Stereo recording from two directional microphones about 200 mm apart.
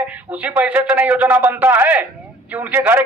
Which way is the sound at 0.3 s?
5° right (ahead or behind).